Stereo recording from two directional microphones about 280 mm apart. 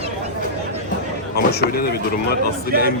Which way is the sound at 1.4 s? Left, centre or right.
Left.